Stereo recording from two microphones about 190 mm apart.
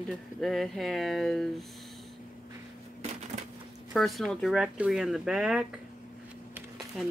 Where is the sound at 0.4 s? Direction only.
Centre (ahead or behind).